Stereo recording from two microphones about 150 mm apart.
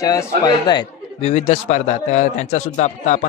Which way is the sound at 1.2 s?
45° left (ahead or behind).